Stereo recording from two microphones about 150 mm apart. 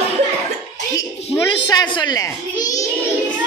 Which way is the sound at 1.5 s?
30° left (ahead or behind).